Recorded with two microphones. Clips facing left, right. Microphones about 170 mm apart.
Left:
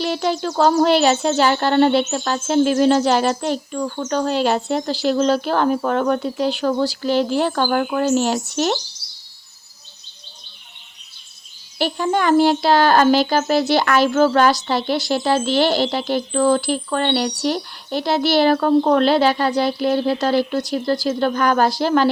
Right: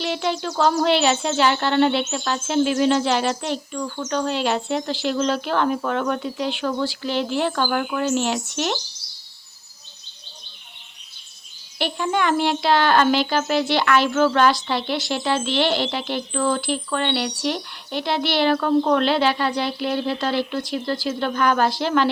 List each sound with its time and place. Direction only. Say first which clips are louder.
0.0 s a child's voice: left 3 dB; 40° left (ahead or behind)
11.8 s a child's voice: left 3 dB; 40° left (ahead or behind)